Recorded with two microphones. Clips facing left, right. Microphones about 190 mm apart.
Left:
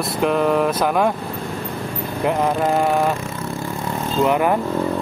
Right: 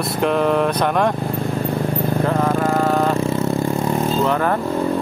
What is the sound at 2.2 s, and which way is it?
Speech, 15° left (ahead or behind).